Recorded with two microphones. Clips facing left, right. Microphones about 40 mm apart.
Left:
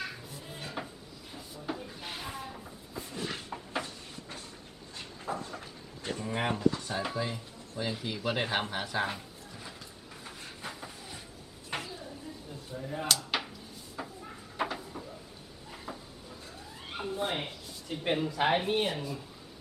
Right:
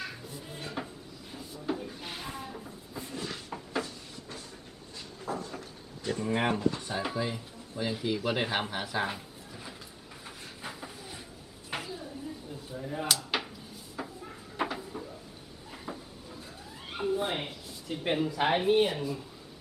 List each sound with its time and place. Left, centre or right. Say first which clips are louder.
0.0 s cupboard open or close: even; centre
1.3 s a sound: right 4 dB; centre
3.7 s a sound: right 3 dB; left
5.3 s cupboard open or close: right 1 dB; left
6.2 s speech: right 4 dB; centre
6.5 s speech: left 1 dB; right
6.8 s speech: right 1 dB; centre
10.2 s train: even; centre
11.7 s a sound: right 1 dB; centre
15.7 s cupboard open or close: right 2 dB; centre
16.9 s speech: right 3 dB; centre